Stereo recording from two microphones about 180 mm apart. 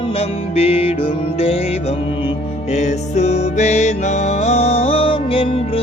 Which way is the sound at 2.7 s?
40° left (ahead or behind).